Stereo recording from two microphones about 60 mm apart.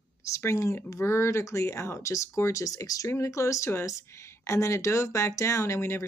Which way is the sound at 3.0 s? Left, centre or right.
Left.